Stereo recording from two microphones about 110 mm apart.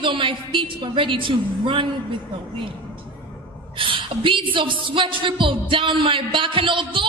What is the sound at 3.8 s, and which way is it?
A man's voice, 50° right (ahead or behind).